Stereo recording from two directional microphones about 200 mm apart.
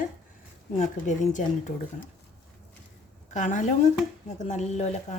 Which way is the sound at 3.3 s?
35° left (ahead or behind).